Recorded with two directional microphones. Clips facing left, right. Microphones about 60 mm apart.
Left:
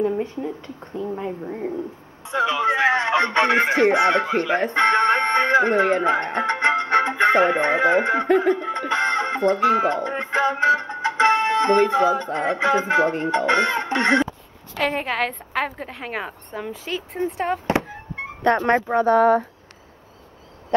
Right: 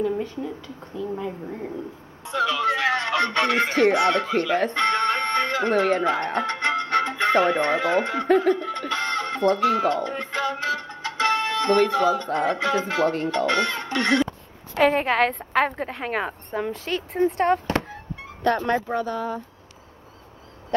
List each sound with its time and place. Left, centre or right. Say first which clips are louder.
0.2 s speech: left 3 dB; left
1.4 s speech: left 4 dB; centre
14.8 s a woman's voice: right 4 dB; centre
17.6 s music: left 3 dB; centre
18.1 s music: left 3 dB; left
18.6 s speech: left 4 dB; left
19.0 s speech: left 12 dB; left